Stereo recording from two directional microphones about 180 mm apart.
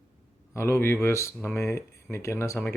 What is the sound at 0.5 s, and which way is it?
Speech, 15° left (ahead or behind).